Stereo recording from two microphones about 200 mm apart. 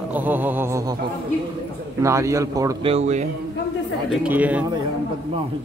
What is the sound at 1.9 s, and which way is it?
Speech, 15° right (ahead or behind).